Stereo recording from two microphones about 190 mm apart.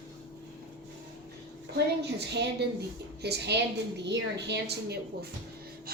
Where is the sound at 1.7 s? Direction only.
60° right (ahead or behind).